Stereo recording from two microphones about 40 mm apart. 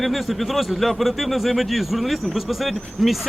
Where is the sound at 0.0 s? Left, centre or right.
Centre.